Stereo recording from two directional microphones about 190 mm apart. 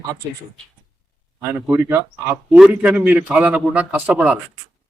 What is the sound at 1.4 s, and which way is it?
Speech, 10° right (ahead or behind).